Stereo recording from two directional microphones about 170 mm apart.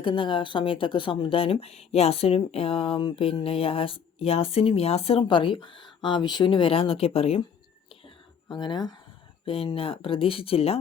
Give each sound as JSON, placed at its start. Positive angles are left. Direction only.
{"t": 0.0, "sound": "speech", "side_deg": 30}
{"t": 8.0, "sound": "a sound", "side_deg": 25}
{"t": 9.5, "sound": "speech", "side_deg": 35}